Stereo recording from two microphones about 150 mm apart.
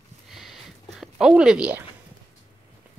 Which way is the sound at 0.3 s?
Centre (ahead or behind).